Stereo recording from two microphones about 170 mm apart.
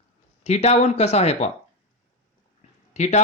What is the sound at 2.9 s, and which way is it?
Speech, 40° left (ahead or behind).